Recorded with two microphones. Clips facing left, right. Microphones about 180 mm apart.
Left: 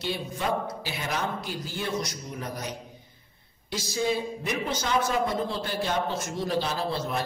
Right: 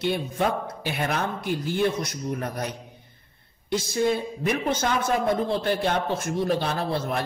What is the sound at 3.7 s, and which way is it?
A man's voice, 55° right (ahead or behind).